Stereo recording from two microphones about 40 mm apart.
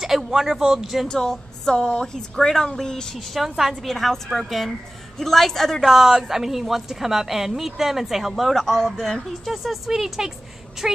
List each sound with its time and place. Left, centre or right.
0.0 s a woman's voice: centre
1.0 s a woman's voice: centre
3.3 s a man's voice: centre
5.9 s a woman's voice: centre